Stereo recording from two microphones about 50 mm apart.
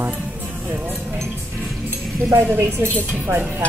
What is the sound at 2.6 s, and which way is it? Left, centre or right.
Speech, right.